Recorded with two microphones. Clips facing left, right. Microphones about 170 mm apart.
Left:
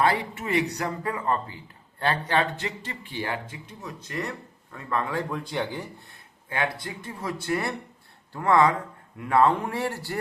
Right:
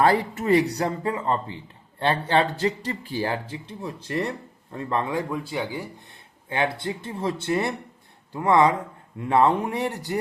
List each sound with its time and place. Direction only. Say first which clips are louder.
0.0 s speech: right 4 dB; 40° right (ahead or behind); by 5.2 s 20° right (ahead or behind)
5.3 s speech: right 1 dB; 5° right (ahead or behind)
6.5 s speech: right 4 dB; 25° right (ahead or behind)